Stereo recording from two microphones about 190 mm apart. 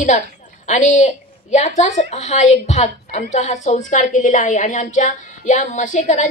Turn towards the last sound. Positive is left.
turn(degrees=40)  # may be behind; listen again after turning